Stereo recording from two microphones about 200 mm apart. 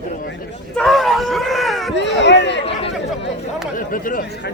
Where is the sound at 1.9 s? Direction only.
60° left (ahead or behind).